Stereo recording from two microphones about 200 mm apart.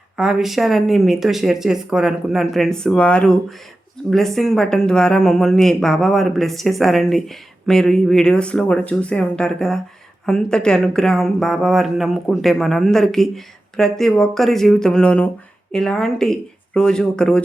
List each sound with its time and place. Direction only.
0.2 s speech: centre (ahead or behind)